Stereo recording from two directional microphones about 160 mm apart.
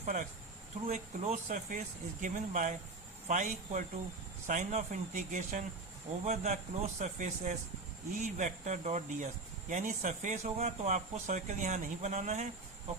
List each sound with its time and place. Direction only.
0.0 s speech: 50° right (ahead or behind)